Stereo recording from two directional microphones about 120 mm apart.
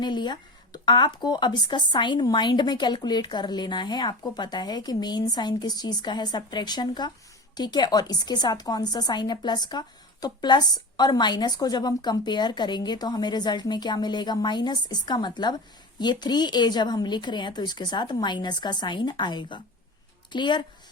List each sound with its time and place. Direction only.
0.0 s a woman's voice: 40° left (ahead or behind)